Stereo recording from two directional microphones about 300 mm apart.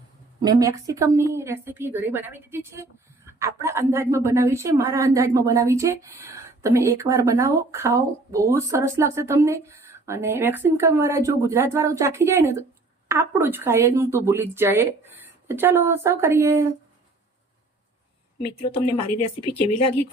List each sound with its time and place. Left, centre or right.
0.4 s a woman's voice: centre
18.4 s speech: left